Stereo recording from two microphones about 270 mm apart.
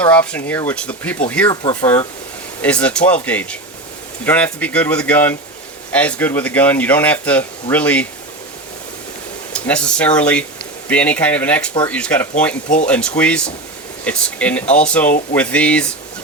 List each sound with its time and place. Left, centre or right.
0.0 s speech: centre
9.5 s speech: centre
12.6 s speech: left
12.9 s speech: centre